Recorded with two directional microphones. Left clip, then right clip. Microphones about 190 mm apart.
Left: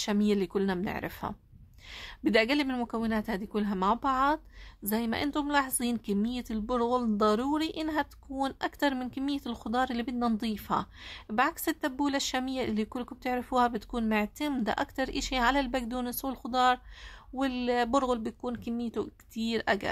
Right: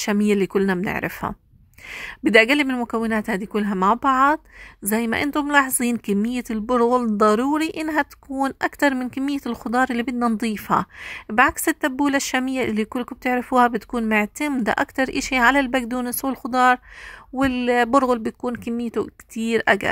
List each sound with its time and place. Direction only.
0.0 s a woman's voice: 30° right (ahead or behind)